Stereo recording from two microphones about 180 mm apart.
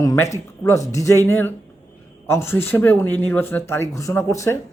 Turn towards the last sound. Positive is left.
turn(degrees=15)  # may be behind; listen again after turning